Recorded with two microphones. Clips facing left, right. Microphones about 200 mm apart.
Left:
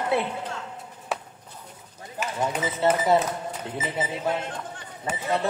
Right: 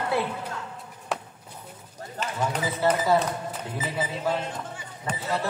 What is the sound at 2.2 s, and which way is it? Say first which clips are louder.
A man's voice: left 1 dB; 15° left (ahead or behind).